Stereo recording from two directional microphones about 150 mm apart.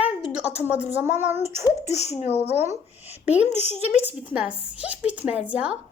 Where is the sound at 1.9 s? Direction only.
45° left (ahead or behind).